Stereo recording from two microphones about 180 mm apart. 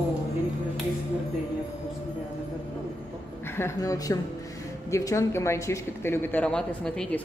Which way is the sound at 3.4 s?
15° left (ahead or behind).